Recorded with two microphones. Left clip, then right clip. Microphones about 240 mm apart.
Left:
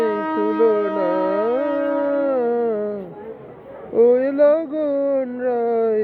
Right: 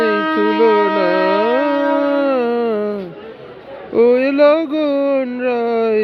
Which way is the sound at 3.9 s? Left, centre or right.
Right.